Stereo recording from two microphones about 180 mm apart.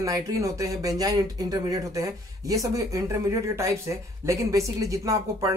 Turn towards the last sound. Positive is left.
turn(degrees=-20)  # may be behind; listen again after turning